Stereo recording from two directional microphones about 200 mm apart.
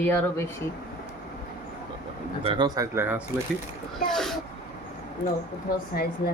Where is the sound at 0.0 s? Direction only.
10° left (ahead or behind).